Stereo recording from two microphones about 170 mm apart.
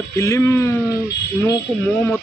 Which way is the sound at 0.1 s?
15° left (ahead or behind).